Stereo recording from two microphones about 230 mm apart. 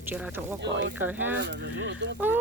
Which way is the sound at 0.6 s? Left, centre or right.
Right.